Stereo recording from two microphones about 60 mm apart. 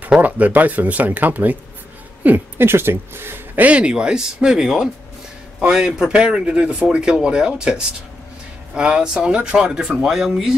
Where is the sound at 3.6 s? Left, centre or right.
Centre.